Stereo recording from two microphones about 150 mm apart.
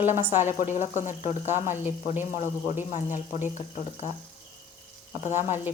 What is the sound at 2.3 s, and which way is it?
Speech, 55° left (ahead or behind).